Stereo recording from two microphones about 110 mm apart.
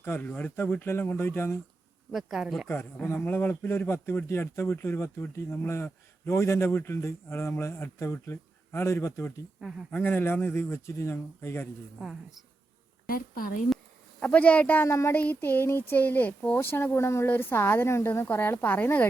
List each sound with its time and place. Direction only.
0.0 s speech: 20° left (ahead or behind)
2.1 s speech: centre (ahead or behind)
3.2 s speech: 20° left (ahead or behind)
9.6 s speech: 5° right (ahead or behind)
9.9 s speech: 15° left (ahead or behind)
14.2 s speech: 15° left (ahead or behind)